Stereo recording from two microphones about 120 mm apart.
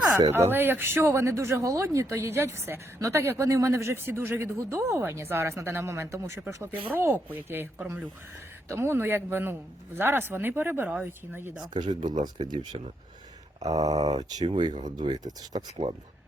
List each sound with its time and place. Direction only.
0.3 s speech: 20° right (ahead or behind)
11.7 s speech: 40° right (ahead or behind)
13.7 s speech: 65° right (ahead or behind)
14.4 s speech: 45° right (ahead or behind)